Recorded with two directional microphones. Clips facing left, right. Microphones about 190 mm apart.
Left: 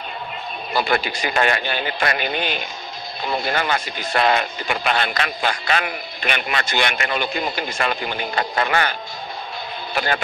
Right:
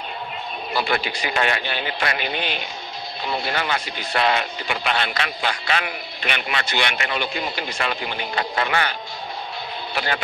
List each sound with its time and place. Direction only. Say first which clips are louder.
0.7 s speech: left 3 dB; 45° left (ahead or behind)
9.9 s speech: left 3 dB; 45° left (ahead or behind)